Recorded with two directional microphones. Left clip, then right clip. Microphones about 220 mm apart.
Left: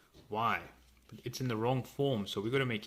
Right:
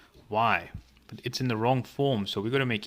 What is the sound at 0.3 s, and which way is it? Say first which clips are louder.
Speech: right 8 dB; 30° right (ahead or behind).